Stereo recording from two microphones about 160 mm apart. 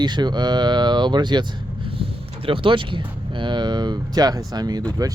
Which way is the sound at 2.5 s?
30° right (ahead or behind).